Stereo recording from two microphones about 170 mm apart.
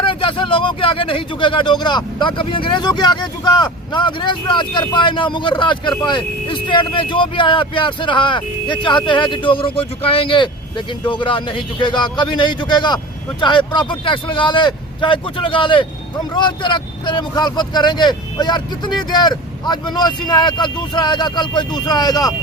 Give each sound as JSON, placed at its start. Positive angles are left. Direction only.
{"t": 0.0, "sound": "speech", "side_deg": 30}